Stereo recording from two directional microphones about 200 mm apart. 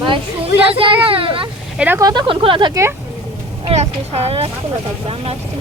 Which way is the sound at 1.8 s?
15° right (ahead or behind).